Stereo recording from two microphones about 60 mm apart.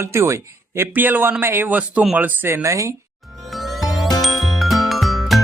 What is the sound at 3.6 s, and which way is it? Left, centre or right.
Music, centre.